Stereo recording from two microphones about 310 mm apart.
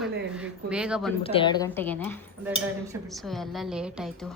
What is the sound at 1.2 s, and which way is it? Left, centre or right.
A woman's voice, centre.